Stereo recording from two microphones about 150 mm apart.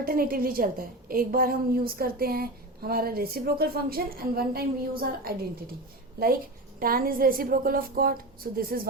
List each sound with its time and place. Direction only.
0.0 s a woman's voice: 75° right (ahead or behind)
6.1 s a woman's voice: 75° right (ahead or behind)